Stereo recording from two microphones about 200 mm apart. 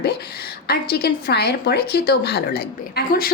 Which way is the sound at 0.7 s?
50° left (ahead or behind).